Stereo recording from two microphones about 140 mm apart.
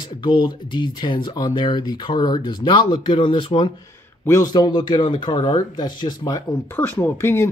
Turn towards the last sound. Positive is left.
turn(degrees=20)  # may be behind; listen again after turning